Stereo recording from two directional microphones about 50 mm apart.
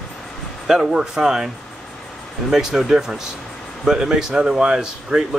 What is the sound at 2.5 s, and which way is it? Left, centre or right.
Speech, centre.